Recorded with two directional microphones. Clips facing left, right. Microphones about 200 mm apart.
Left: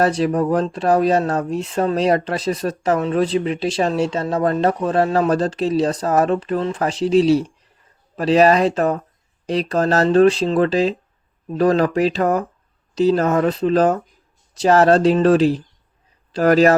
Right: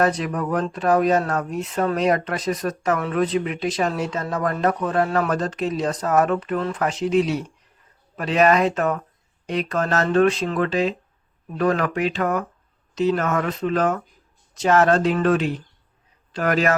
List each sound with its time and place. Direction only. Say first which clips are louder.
0.0 s speech: left 4 dB; 30° left (ahead or behind)